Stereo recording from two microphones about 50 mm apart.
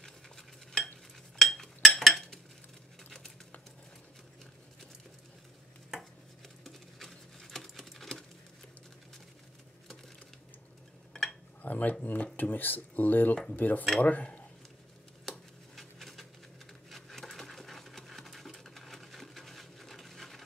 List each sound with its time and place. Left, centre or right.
0.0 s cutlery: centre
1.4 s chink: centre
3.0 s a sound: centre
6.6 s patter: centre
11.6 s speech: left
13.3 s speech: centre
13.6 s speech: left
15.2 s a sound: centre
16.9 s sewing machine: centre